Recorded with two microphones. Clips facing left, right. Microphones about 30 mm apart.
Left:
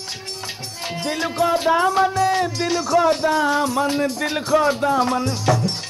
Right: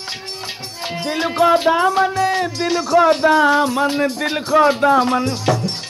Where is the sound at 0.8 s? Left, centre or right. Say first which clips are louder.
Right 3 dB; right.